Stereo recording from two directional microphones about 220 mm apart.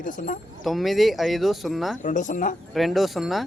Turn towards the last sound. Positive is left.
turn(degrees=0)  # may be behind; listen again after turning